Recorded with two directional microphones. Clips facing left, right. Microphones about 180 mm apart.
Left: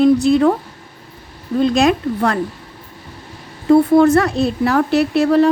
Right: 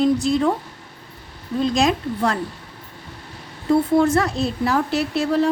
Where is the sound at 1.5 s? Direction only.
60° left (ahead or behind).